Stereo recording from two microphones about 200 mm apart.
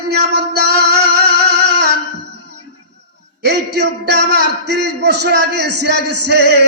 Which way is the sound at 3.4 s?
55° right (ahead or behind).